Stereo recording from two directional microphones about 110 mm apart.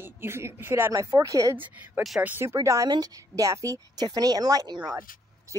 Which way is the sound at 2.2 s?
20° right (ahead or behind).